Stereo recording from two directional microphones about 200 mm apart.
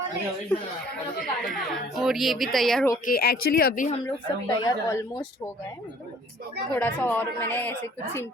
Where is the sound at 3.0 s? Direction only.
50° left (ahead or behind).